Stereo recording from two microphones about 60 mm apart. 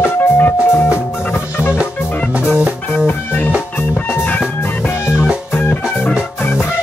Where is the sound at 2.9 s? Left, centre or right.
Left.